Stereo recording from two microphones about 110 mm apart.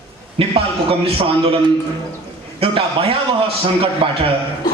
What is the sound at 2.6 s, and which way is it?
A man's voice, 55° right (ahead or behind).